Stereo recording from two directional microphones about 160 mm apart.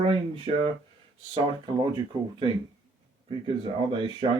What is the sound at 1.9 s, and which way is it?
Speech, 30° right (ahead or behind).